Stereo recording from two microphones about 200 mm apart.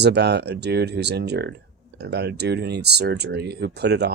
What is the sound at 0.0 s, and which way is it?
Speech, 55° right (ahead or behind).